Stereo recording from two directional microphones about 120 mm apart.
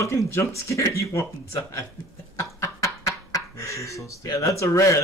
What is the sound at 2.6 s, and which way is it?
Speech, 25° left (ahead or behind).